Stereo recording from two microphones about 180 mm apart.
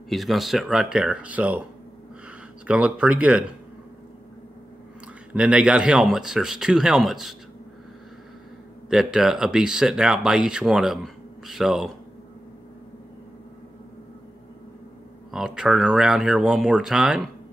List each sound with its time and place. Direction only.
0.1 s speech: centre (ahead or behind)
2.6 s speech: 5° right (ahead or behind)
5.3 s speech: 5° right (ahead or behind)
8.9 s speech: 5° right (ahead or behind)
15.3 s speech: 5° right (ahead or behind)